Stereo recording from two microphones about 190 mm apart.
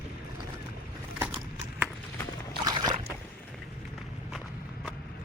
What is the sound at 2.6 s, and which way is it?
Boat, 20° right (ahead or behind).